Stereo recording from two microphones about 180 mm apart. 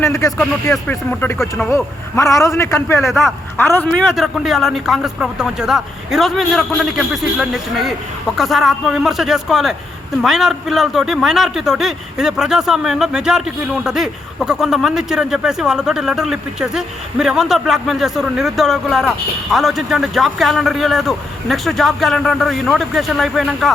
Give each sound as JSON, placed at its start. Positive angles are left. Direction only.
{"t": 0.0, "sound": "a man's voice", "side_deg": 20}
{"t": 0.3, "sound": "a man's voice", "side_deg": 10}
{"t": 3.0, "sound": "speech", "side_deg": 0}
{"t": 3.6, "sound": "a man's voice", "side_deg": 10}
{"t": 4.0, "sound": "speech", "side_deg": 0}